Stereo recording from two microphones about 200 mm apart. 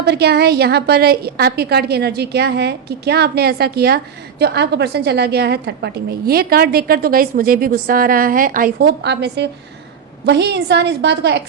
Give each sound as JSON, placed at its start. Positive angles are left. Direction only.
{"t": 0.0, "sound": "a woman's voice", "side_deg": -55}